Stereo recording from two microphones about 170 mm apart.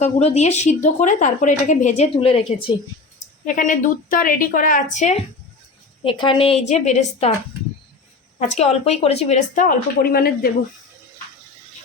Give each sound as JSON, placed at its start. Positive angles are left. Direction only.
{"t": 0.0, "sound": "a woman's voice", "side_deg": 40}
{"t": 3.4, "sound": "a woman's voice", "side_deg": 50}
{"t": 6.0, "sound": "a woman's voice", "side_deg": 30}
{"t": 8.5, "sound": "a woman's voice", "side_deg": 40}